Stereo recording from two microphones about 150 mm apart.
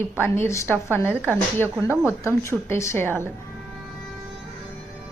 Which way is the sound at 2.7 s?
15° left (ahead or behind).